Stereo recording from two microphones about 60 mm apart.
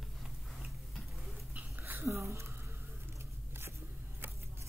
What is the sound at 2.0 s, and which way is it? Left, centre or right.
Speech, right.